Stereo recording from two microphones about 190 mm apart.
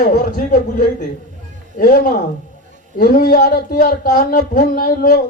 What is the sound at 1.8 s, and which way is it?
Speech, 50° left (ahead or behind).